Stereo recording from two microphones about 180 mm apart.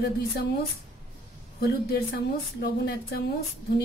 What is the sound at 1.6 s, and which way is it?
A woman's voice, 60° left (ahead or behind).